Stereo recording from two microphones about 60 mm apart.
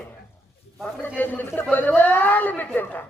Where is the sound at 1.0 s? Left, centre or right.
Left.